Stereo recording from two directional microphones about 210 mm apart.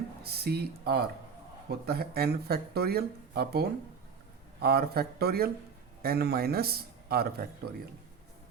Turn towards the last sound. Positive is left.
turn(degrees=-45)  # may be behind; listen again after turning